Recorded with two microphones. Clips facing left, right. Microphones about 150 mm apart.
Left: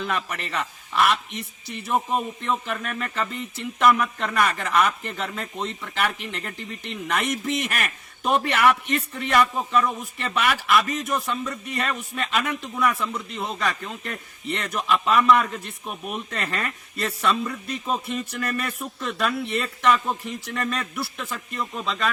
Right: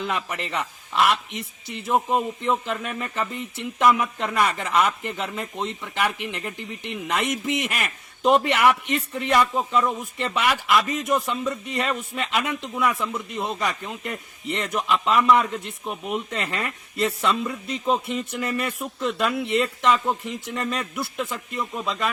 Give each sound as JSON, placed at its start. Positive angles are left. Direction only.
{"t": 0.0, "sound": "a man's voice", "side_deg": -20}